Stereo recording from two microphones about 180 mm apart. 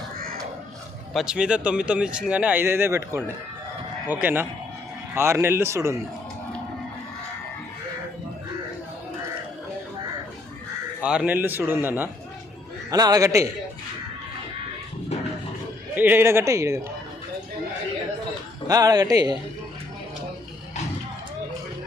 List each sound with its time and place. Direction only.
1.1 s speech: 5° right (ahead or behind)
11.0 s speech: 5° right (ahead or behind)
16.0 s speech: 10° right (ahead or behind)
18.7 s speech: 20° right (ahead or behind)